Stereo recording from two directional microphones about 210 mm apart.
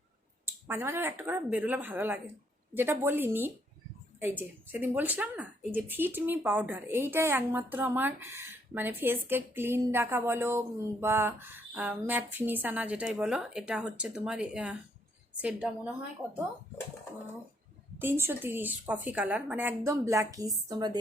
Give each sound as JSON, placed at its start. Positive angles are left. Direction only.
{"t": 0.4, "sound": "a woman's voice", "side_deg": -10}
{"t": 18.0, "sound": "a woman's voice", "side_deg": -10}